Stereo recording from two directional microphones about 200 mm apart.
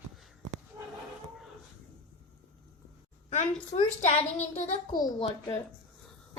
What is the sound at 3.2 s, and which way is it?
Speech, 35° left (ahead or behind).